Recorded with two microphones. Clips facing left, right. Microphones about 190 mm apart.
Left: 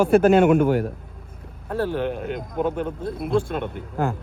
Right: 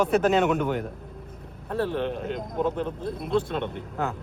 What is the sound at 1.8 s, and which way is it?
Speech, 5° left (ahead or behind).